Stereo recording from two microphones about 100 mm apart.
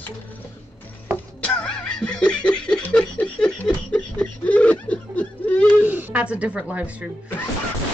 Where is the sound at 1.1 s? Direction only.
10° left (ahead or behind).